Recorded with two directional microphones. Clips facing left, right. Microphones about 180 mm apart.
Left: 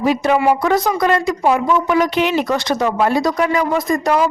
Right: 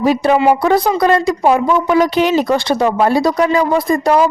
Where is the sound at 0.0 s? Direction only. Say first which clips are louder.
Right 3 dB; 35° right (ahead or behind).